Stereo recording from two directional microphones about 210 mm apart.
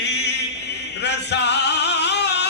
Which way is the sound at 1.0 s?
55° left (ahead or behind).